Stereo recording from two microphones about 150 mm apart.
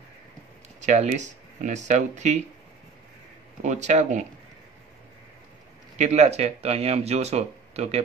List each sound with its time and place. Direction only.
0.7 s speech: 50° right (ahead or behind)
3.6 s speech: 50° right (ahead or behind)
5.9 s speech: 50° right (ahead or behind)